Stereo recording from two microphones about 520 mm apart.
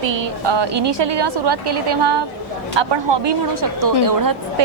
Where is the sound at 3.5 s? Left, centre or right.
Right.